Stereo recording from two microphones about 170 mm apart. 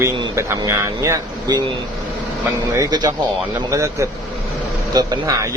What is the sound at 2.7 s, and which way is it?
Speech, 20° right (ahead or behind).